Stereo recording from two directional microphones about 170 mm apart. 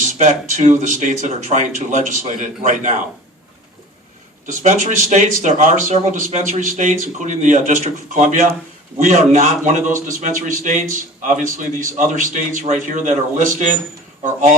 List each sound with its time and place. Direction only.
0.1 s a man's voice: 50° right (ahead or behind)
4.6 s a man's voice: 45° right (ahead or behind)